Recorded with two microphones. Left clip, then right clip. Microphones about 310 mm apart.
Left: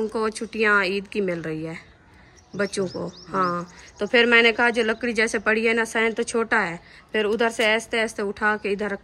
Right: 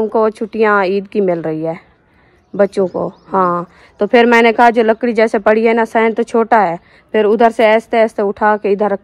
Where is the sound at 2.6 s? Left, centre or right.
Centre.